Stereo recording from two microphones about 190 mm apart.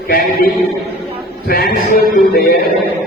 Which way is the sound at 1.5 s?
50° left (ahead or behind).